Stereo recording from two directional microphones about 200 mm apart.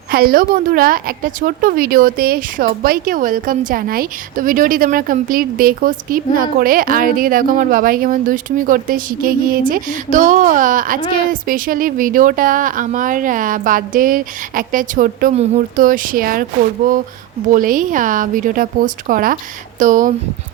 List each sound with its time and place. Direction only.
0.1 s a woman's voice: 50° right (ahead or behind)